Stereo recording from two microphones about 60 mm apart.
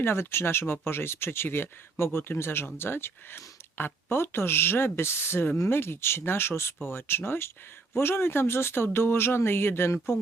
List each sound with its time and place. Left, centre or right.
0.0 s speech: left